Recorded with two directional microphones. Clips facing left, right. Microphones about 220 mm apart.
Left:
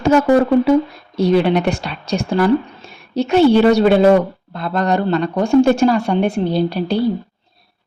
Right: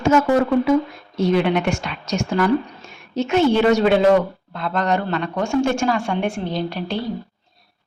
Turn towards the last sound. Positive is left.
turn(degrees=35)  # may be behind; listen again after turning